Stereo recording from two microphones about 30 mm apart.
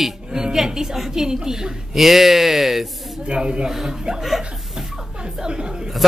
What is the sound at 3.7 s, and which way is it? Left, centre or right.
Speech, centre.